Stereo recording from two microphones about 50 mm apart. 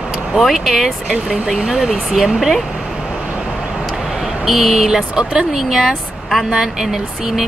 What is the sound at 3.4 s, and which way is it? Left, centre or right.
Vehicle, centre.